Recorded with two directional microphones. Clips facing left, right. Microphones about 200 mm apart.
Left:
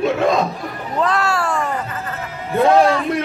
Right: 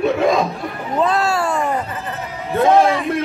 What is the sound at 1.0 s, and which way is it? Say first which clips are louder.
Speech: right 1 dB; 25° right (ahead or behind).